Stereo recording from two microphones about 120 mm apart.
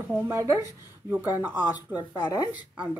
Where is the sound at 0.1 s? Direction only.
20° right (ahead or behind).